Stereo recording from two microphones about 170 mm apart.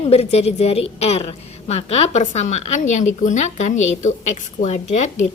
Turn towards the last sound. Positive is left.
turn(degrees=45)  # may be behind; listen again after turning